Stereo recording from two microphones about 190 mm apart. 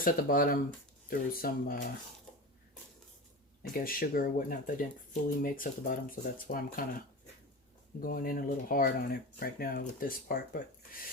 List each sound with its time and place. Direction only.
0.0 s speech: 50° left (ahead or behind)
3.6 s speech: 50° left (ahead or behind)
8.0 s speech: 50° left (ahead or behind)